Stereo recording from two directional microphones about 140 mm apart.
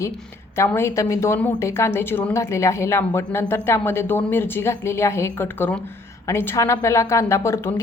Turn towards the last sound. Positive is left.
turn(degrees=20)  # may be behind; listen again after turning